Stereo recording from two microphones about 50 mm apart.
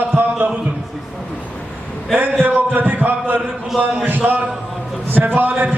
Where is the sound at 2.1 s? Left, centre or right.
Right.